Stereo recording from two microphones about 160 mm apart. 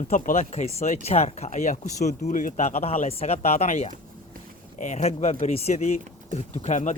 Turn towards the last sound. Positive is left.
turn(degrees=50)  # may be behind; listen again after turning